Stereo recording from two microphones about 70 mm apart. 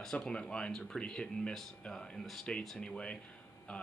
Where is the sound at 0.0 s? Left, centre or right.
Centre.